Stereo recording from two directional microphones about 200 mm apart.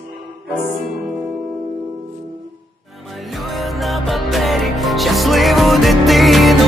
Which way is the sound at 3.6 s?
Centre (ahead or behind).